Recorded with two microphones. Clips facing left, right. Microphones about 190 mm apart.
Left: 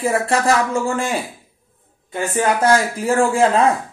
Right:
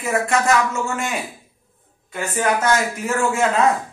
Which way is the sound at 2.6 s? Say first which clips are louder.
Left 4 dB; 30° left (ahead or behind).